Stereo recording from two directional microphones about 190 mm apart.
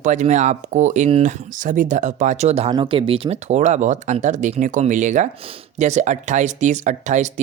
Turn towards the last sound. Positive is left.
turn(degrees=-40)  # may be behind; listen again after turning